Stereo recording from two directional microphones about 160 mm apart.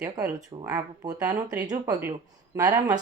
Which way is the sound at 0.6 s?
25° right (ahead or behind).